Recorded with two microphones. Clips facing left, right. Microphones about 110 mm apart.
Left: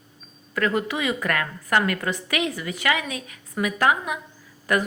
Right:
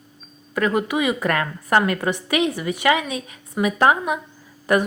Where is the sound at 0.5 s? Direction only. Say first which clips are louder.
Right 3 dB; 20° right (ahead or behind).